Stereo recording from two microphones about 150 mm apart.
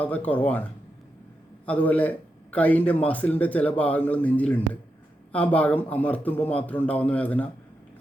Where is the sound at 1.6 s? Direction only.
10° left (ahead or behind).